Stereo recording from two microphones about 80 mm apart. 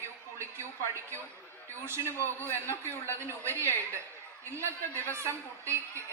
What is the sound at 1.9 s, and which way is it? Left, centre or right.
Speech, right.